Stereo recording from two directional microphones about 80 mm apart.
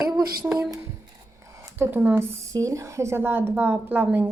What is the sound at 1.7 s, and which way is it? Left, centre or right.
A woman's voice, right.